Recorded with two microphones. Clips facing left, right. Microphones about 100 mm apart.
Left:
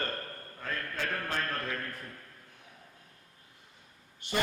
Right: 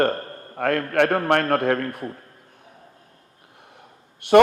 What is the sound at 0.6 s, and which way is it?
A man's voice, 70° right (ahead or behind).